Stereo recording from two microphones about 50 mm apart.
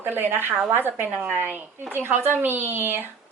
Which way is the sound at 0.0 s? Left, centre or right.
Right.